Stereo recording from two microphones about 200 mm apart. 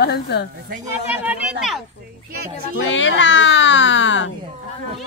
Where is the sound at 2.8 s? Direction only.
70° left (ahead or behind).